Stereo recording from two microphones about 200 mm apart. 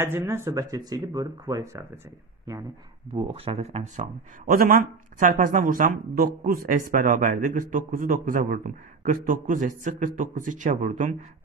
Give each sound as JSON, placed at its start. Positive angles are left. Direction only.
{"t": 0.0, "sound": "speech", "side_deg": -10}
{"t": 3.2, "sound": "speech", "side_deg": -30}